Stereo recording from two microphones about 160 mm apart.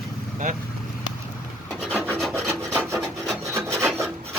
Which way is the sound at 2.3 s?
15° right (ahead or behind).